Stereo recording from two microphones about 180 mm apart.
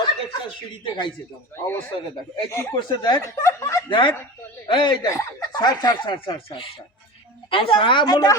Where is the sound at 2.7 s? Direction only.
25° left (ahead or behind).